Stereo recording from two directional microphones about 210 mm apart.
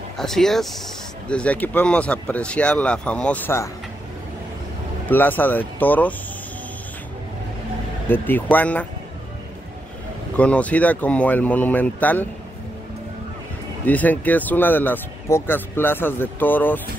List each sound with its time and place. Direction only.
0.2 s speech: centre (ahead or behind)
5.1 s speech: 10° left (ahead or behind)
8.1 s speech: 10° left (ahead or behind)
10.3 s speech: 5° left (ahead or behind)
13.8 s speech: 10° left (ahead or behind)